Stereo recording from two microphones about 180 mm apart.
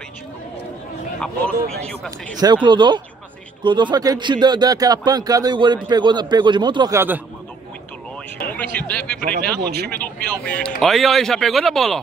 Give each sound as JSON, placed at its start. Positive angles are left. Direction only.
{"t": 1.2, "sound": "a man's voice", "side_deg": 5}
{"t": 2.3, "sound": "a man's voice", "side_deg": -25}
{"t": 8.5, "sound": "speech", "side_deg": 5}
{"t": 9.7, "sound": "speech", "side_deg": -60}
{"t": 10.2, "sound": "speech", "side_deg": 5}